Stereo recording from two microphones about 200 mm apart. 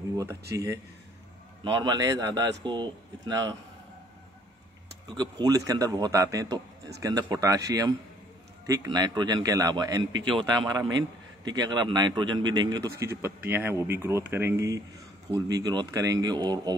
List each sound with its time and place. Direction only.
0.2 s a man's voice: 15° right (ahead or behind)
5.0 s a man's voice: 20° right (ahead or behind)